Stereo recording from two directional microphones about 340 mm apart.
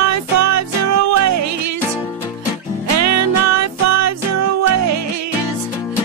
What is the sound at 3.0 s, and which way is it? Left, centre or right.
Music, right.